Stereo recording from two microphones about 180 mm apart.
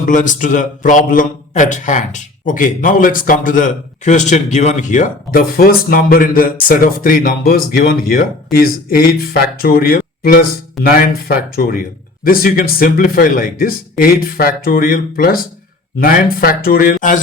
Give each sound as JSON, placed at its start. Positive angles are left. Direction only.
{"t": 0.0, "sound": "a man's voice", "side_deg": 45}